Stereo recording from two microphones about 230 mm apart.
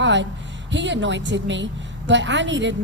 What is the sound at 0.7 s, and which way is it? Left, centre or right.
A woman's voice, right.